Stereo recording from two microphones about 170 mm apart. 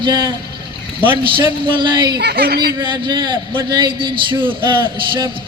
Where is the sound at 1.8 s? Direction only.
25° right (ahead or behind).